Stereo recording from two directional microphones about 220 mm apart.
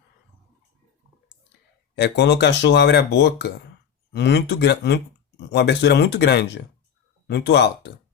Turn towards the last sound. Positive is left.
turn(degrees=50)  # may be behind; listen again after turning